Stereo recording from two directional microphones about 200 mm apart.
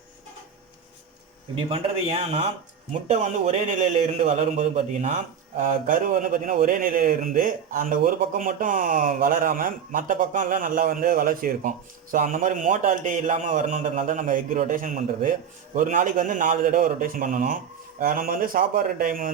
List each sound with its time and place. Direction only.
1.7 s a man's voice: 30° right (ahead or behind)